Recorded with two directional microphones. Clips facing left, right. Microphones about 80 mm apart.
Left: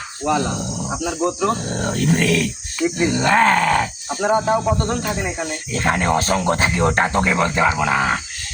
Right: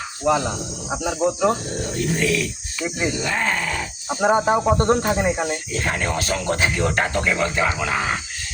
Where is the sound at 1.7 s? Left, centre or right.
Left.